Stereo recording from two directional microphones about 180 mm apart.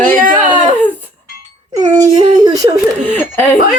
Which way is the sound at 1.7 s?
20° right (ahead or behind).